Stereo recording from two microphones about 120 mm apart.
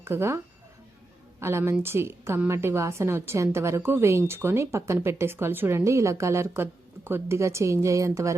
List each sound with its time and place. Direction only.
0.0 s a woman's voice: 20° right (ahead or behind)
1.4 s a woman's voice: 20° right (ahead or behind)